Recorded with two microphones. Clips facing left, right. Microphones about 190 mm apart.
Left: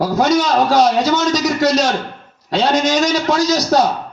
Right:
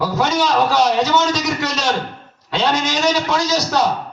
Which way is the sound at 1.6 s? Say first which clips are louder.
Left 6 dB; 40° left (ahead or behind).